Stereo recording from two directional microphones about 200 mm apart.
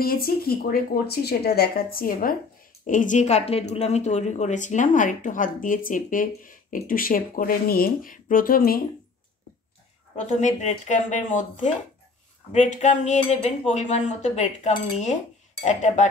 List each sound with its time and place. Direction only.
0.0 s a woman's voice: 50° left (ahead or behind)
10.1 s a woman's voice: 35° left (ahead or behind)